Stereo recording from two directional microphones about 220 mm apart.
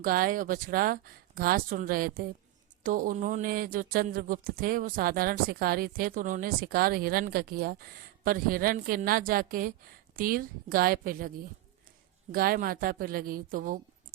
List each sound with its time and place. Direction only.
0.0 s speech: 40° right (ahead or behind)
12.3 s speech: 40° right (ahead or behind)